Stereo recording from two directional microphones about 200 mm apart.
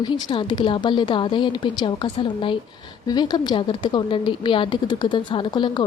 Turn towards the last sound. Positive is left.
turn(degrees=20)  # may be behind; listen again after turning